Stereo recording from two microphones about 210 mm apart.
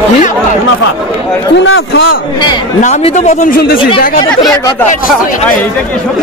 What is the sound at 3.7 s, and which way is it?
Speech, 25° left (ahead or behind).